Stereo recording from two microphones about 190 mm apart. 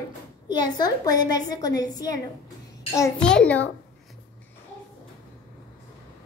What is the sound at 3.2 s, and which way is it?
Speech, 5° left (ahead or behind).